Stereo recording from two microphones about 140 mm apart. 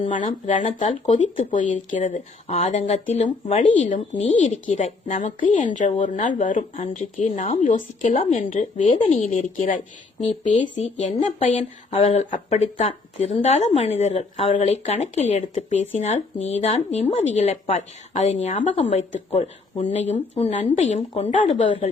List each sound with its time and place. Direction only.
0.4 s a woman's voice: 60° left (ahead or behind)
2.5 s a woman's voice: 50° left (ahead or behind)
11.9 s a woman's voice: 50° left (ahead or behind)